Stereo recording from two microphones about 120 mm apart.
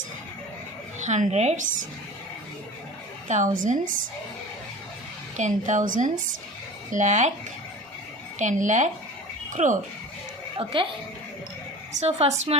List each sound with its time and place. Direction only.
0.9 s speech: 85° right
3.2 s a woman's voice: 85° right
5.4 s a woman's voice: 90° right
6.9 s speech: 75° right (ahead or behind)
8.4 s a woman's voice: 90° right
10.6 s speech: 45° right (ahead or behind)
11.9 s a woman's voice: 60° right (ahead or behind)